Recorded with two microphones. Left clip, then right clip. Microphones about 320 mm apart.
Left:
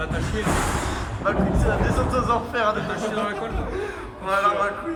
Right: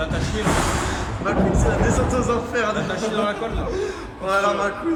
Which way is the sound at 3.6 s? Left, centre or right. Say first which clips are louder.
Right 3 dB; centre.